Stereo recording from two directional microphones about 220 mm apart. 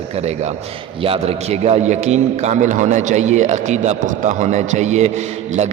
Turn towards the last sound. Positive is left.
turn(degrees=-30)  # may be behind; listen again after turning